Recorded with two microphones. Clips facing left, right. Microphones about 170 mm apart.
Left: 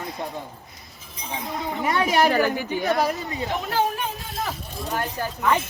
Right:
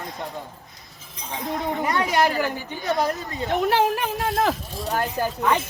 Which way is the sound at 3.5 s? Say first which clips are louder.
Right 5 dB; 70° right (ahead or behind).